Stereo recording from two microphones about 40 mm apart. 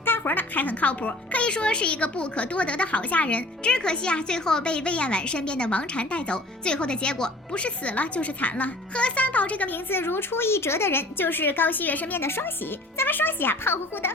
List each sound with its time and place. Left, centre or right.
0.0 s speech: left
1.5 s a woman's voice: left
3.7 s a woman's voice: left
9.6 s a woman's voice: left
12.2 s speech: left
13.0 s a woman's voice: left